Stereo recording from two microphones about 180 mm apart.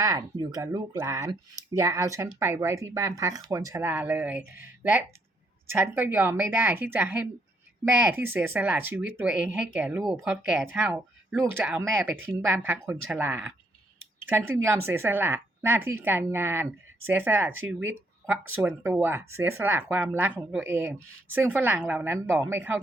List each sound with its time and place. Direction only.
0.0 s speech: 20° right (ahead or behind)